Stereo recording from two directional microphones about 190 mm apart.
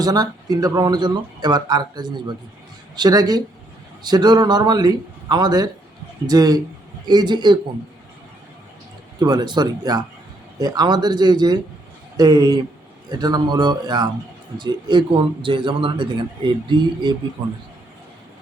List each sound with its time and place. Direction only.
0.0 s a man's voice: 20° right (ahead or behind)
9.1 s a man's voice: 20° right (ahead or behind)